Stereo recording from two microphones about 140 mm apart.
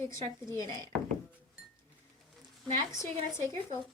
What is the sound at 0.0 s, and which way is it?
Speech, 20° left (ahead or behind).